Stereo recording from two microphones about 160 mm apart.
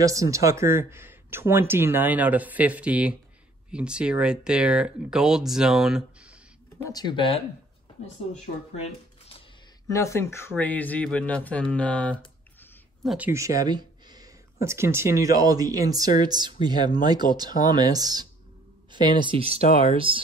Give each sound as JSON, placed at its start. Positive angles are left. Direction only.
{"t": 0.0, "sound": "speech", "side_deg": -20}
{"t": 6.8, "sound": "speech", "side_deg": 25}
{"t": 8.8, "sound": "a sound", "side_deg": 40}
{"t": 9.8, "sound": "speech", "side_deg": 20}
{"t": 13.3, "sound": "speech", "side_deg": -20}